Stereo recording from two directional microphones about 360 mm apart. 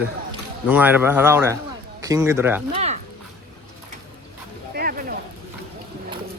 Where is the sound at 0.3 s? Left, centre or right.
Centre.